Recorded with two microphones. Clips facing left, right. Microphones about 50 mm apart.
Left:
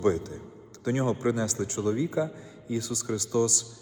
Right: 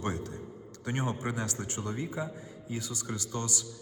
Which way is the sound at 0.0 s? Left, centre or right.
Right.